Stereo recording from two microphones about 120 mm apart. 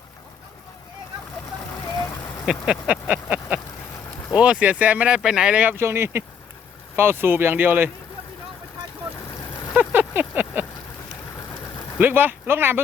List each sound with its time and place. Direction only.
2.5 s speech: 5° right (ahead or behind)
9.7 s vehicle: 15° right (ahead or behind)
11.9 s speech: 15° right (ahead or behind)